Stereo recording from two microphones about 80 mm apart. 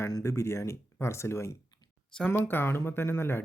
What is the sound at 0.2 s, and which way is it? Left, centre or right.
Speech, left.